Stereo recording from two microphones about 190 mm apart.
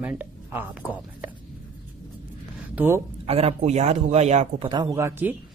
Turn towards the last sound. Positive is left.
turn(degrees=-10)  # may be behind; listen again after turning